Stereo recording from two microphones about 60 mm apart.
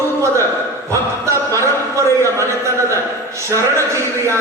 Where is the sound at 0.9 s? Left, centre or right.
Right.